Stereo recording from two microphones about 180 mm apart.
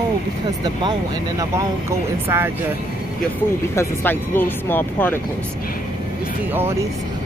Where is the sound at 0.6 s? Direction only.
25° right (ahead or behind).